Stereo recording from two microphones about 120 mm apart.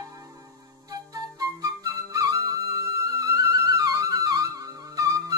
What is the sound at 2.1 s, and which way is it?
Music, 30° right (ahead or behind).